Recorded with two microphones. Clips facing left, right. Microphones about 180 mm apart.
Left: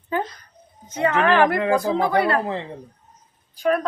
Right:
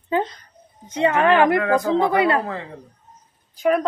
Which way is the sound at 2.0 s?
20° right (ahead or behind).